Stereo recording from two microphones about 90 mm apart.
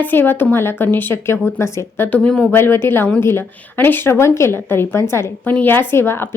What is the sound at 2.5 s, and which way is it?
Speech, 25° left (ahead or behind).